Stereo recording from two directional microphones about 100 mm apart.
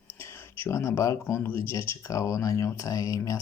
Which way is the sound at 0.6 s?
25° left (ahead or behind).